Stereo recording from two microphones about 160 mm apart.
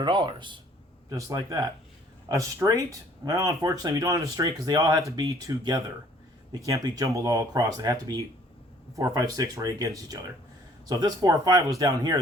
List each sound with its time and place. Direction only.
0.0 s speech: 30° right (ahead or behind)